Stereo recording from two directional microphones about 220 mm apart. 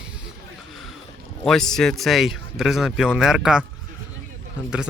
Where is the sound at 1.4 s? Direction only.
Centre (ahead or behind).